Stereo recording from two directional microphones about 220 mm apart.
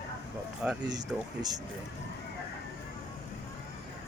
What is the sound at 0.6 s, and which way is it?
Speech, 5° right (ahead or behind).